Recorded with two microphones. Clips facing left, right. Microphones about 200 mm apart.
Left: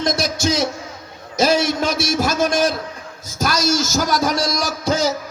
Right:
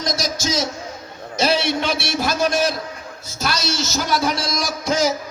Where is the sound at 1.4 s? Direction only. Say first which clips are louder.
Left 3 dB; 45° left (ahead or behind).